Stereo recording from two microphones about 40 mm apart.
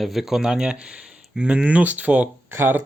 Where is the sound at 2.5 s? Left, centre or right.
Right.